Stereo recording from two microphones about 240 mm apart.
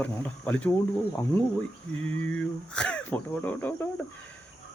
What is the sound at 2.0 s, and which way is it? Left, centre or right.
Speech, centre.